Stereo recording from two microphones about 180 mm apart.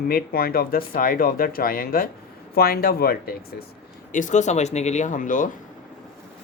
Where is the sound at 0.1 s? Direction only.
55° left (ahead or behind).